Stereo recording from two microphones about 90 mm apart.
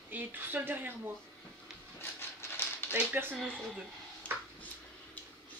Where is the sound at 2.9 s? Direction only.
20° right (ahead or behind).